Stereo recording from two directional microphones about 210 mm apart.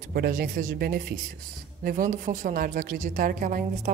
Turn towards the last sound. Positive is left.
turn(degrees=-40)  # may be behind; listen again after turning